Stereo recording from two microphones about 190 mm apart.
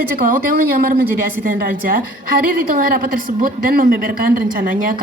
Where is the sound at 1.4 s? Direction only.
50° right (ahead or behind).